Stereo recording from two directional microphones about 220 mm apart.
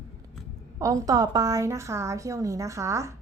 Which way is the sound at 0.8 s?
15° right (ahead or behind).